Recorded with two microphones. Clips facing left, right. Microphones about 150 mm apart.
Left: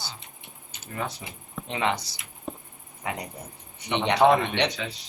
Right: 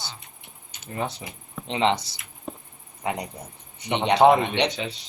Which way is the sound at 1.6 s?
25° right (ahead or behind).